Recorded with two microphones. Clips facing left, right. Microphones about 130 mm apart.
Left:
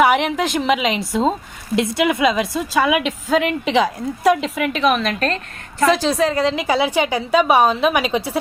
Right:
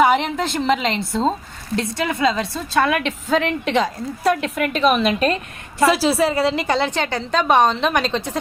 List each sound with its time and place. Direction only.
0.0 s a woman's voice: 10° left (ahead or behind)